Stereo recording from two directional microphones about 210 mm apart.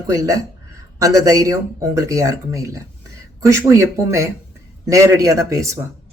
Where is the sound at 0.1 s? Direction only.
15° right (ahead or behind).